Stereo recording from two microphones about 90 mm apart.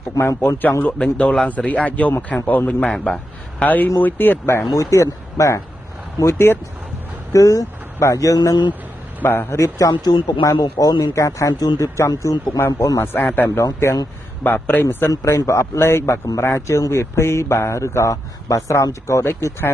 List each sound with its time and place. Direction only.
0.4 s speech: 20° left (ahead or behind)
7.3 s speech: 35° left (ahead or behind); by 8.7 s 55° left (ahead or behind)
9.2 s speech: 20° left (ahead or behind)
9.8 s speech: 50° left (ahead or behind); by 13.0 s 35° left (ahead or behind)
13.0 s speech: 20° left (ahead or behind)